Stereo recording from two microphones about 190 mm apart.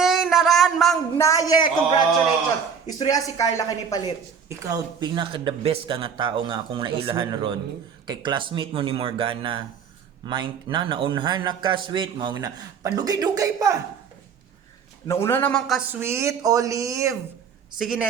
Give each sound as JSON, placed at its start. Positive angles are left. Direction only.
{"t": 0.0, "sound": "a sound", "side_deg": 0}
{"t": 1.1, "sound": "speech", "side_deg": 15}
{"t": 4.4, "sound": "speech", "side_deg": -20}
{"t": 15.0, "sound": "a man's voice", "side_deg": 15}
{"t": 16.0, "sound": "speech", "side_deg": -15}
{"t": 17.7, "sound": "a woman's voice", "side_deg": -5}